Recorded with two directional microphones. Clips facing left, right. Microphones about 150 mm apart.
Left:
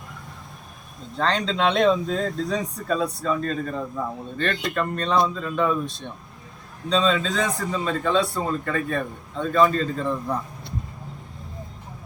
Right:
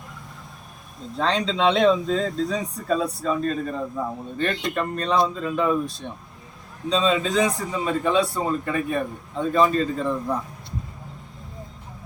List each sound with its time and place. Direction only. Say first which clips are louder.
1.1 s speech: even; 5° right (ahead or behind)